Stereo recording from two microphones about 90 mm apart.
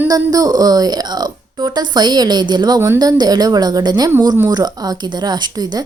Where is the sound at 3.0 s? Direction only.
45° right (ahead or behind).